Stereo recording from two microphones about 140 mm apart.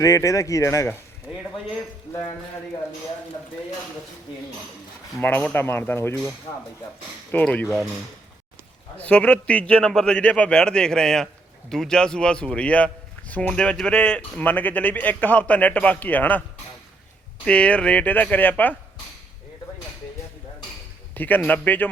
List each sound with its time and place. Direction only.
0.0 s speech: 25° left (ahead or behind)
5.2 s speech: 10° left (ahead or behind)
7.3 s speech: 10° left (ahead or behind)
9.0 s speech: 10° left (ahead or behind)
17.4 s speech: 10° left (ahead or behind)
21.2 s speech: 15° left (ahead or behind)